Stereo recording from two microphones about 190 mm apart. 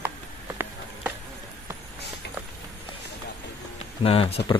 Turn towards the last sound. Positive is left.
turn(degrees=30)  # may be behind; listen again after turning